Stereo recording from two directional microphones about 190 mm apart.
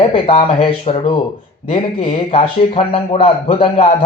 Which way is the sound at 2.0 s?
30° left (ahead or behind).